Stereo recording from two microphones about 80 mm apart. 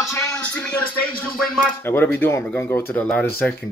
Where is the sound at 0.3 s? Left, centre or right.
Centre.